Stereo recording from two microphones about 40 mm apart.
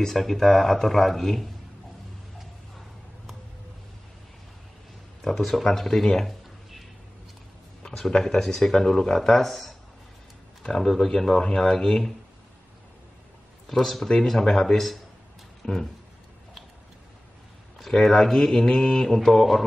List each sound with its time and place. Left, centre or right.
0.0 s speech: centre
5.2 s speech: centre
7.8 s a sound: centre
8.2 s speech: centre
13.7 s speech: centre
17.8 s speech: centre